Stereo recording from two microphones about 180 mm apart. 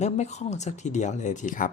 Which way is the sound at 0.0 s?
40° left (ahead or behind).